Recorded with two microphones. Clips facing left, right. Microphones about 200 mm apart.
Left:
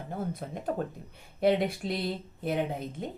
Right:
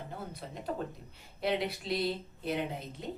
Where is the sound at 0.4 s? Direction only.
50° left (ahead or behind).